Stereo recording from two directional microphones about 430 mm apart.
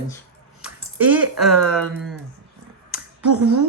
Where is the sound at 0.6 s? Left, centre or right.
Centre.